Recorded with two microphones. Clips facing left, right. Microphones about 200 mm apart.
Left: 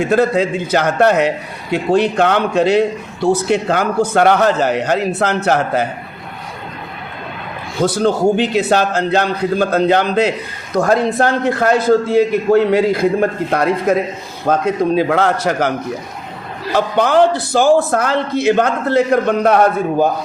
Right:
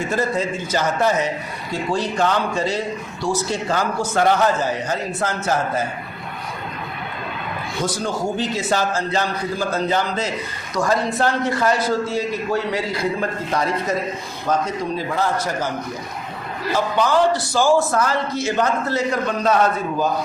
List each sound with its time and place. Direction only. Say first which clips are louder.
0.1 s a man's voice: left 8 dB; 65° left (ahead or behind)
7.8 s a man's voice: left 10 dB; 65° left (ahead or behind)
16.7 s a man's voice: left 5 dB; 65° left (ahead or behind)